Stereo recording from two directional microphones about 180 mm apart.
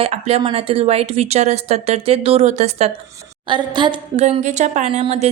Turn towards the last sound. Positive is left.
turn(degrees=-35)  # may be behind; listen again after turning